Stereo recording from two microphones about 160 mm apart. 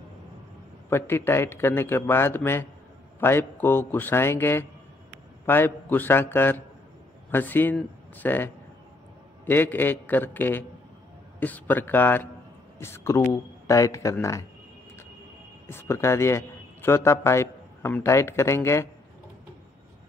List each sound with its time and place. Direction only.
0.8 s a man's voice: 15° left (ahead or behind)
9.5 s a man's voice: 10° left (ahead or behind)
15.7 s a man's voice: 15° left (ahead or behind)